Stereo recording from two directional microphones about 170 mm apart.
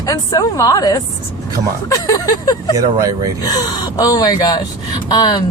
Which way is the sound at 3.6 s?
25° left (ahead or behind).